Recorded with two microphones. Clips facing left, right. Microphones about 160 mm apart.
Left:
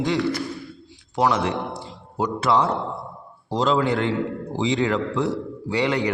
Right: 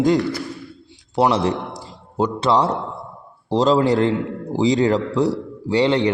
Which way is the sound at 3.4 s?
35° right (ahead or behind).